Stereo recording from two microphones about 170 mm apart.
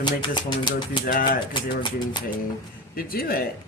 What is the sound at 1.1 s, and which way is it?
Speech, 55° left (ahead or behind).